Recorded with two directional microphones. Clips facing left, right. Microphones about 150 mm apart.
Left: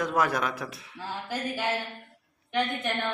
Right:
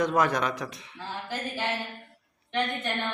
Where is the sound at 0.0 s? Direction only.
5° left (ahead or behind).